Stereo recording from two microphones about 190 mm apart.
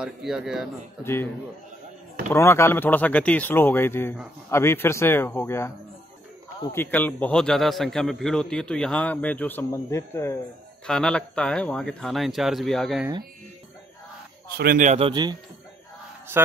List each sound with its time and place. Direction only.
0.0 s speech: 5° right (ahead or behind)
1.0 s a man's voice: 10° left (ahead or behind)
2.3 s a man's voice: 15° left (ahead or behind)
6.7 s a man's voice: 10° left (ahead or behind)
14.6 s speech: 45° right (ahead or behind); by 15.3 s 25° right (ahead or behind)